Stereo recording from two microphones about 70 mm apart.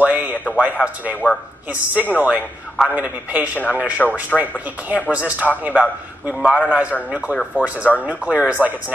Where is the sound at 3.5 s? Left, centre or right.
Left.